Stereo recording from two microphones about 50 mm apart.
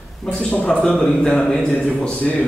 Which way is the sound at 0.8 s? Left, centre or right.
Centre.